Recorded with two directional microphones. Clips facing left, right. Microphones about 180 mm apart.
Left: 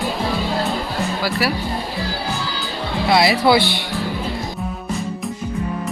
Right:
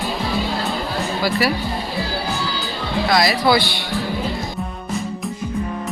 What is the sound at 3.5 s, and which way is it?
Speech, 20° left (ahead or behind).